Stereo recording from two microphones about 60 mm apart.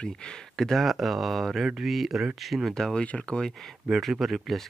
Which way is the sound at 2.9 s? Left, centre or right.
Centre.